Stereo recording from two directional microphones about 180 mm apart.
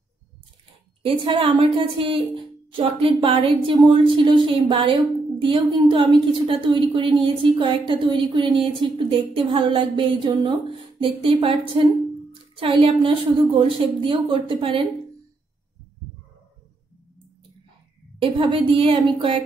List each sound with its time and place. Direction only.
1.0 s a woman's voice: 30° right (ahead or behind)
18.2 s a woman's voice: 30° right (ahead or behind)